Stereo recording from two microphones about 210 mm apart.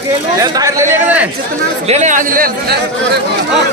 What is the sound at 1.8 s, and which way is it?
Speech, 35° right (ahead or behind).